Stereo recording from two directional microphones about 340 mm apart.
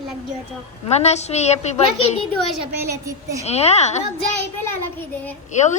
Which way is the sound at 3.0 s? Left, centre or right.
Centre.